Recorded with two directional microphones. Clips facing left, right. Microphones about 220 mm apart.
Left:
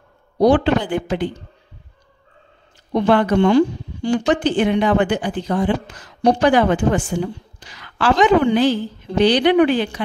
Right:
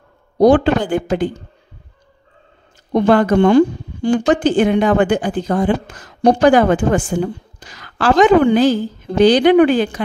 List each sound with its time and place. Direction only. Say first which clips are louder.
0.4 s a woman's voice: right 3 dB; 45° right (ahead or behind)
2.9 s a woman's voice: right 3 dB; 45° right (ahead or behind)